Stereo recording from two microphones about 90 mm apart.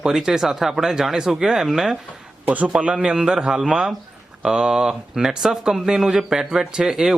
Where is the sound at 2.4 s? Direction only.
15° right (ahead or behind).